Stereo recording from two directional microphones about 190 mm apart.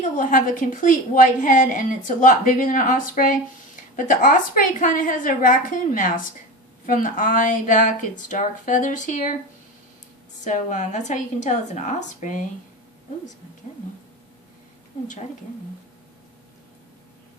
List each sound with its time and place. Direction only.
0.2 s speech: 45° left (ahead or behind)
10.4 s a woman's voice: 40° left (ahead or behind)